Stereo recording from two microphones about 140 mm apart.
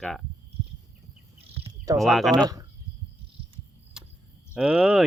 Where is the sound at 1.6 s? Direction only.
25° right (ahead or behind).